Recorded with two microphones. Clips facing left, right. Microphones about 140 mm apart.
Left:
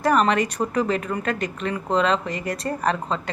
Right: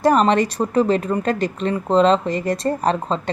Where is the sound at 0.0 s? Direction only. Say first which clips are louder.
Right 4 dB; 30° right (ahead or behind).